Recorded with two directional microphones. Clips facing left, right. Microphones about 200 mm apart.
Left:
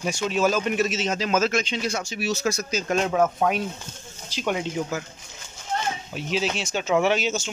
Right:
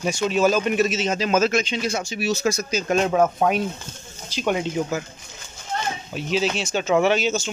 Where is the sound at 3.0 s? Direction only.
35° right (ahead or behind).